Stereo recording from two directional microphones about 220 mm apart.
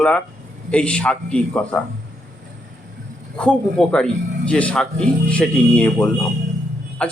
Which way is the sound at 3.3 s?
5° left (ahead or behind).